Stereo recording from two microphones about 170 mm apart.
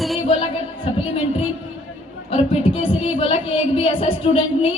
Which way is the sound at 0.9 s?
35° left (ahead or behind).